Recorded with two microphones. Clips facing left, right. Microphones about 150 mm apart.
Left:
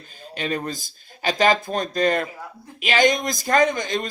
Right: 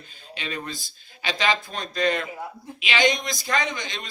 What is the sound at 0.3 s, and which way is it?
Speech, 45° left (ahead or behind).